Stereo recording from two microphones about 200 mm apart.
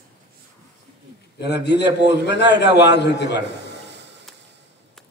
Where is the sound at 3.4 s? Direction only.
60° right (ahead or behind).